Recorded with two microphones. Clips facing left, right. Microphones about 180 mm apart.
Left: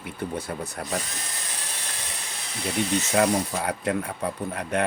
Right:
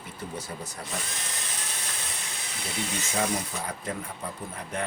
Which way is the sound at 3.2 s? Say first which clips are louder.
Left 6 dB; 70° left (ahead or behind).